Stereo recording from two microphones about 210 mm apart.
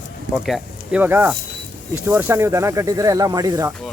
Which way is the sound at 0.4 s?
5° right (ahead or behind).